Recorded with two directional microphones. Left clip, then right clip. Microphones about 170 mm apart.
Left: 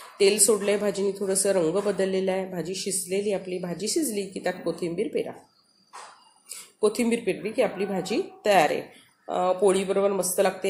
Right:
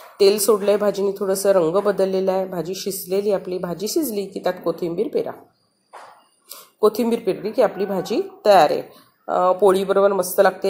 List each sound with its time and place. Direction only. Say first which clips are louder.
0.2 s speech: right 5 dB; 15° right (ahead or behind)
6.8 s speech: right 6 dB; 15° right (ahead or behind)